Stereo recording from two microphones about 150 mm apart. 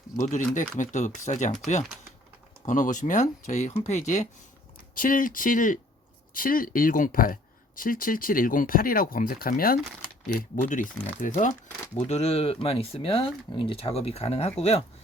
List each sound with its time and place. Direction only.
0.2 s speech: 55° left (ahead or behind)
2.6 s speech: 55° left (ahead or behind)
4.9 s speech: 65° left (ahead or behind)
10.2 s speech: 55° left (ahead or behind)
11.9 s speech: 45° left (ahead or behind)